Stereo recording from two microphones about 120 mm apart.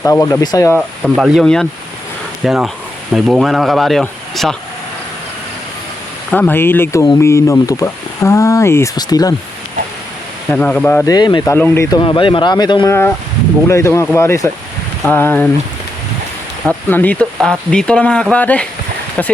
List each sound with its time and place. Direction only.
0.0 s speech: 25° left (ahead or behind)
1.1 s speech: 5° right (ahead or behind)
6.3 s speech: 15° left (ahead or behind); by 9.3 s 30° left (ahead or behind)
10.5 s speech: 10° left (ahead or behind)
11.0 s speech: 35° left (ahead or behind)
11.5 s speech: 20° left (ahead or behind)
11.9 s speech: 45° left (ahead or behind)
12.9 s speech: 20° left (ahead or behind)
16.6 s speech: 15° left (ahead or behind)